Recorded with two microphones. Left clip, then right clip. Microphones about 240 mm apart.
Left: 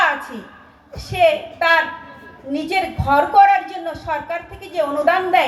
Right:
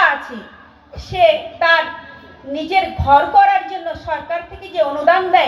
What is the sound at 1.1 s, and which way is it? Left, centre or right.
A woman's voice, left.